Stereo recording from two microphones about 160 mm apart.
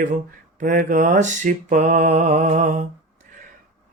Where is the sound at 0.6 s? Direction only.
55° right (ahead or behind).